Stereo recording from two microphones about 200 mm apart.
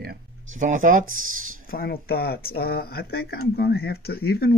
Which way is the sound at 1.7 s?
50° left (ahead or behind).